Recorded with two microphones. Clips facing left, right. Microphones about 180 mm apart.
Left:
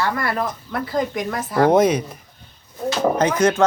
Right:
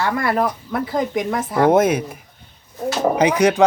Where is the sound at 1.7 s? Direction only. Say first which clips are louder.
Right 1 dB; 5° right (ahead or behind).